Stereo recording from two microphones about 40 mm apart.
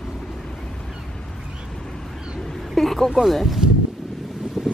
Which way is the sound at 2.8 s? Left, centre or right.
Centre.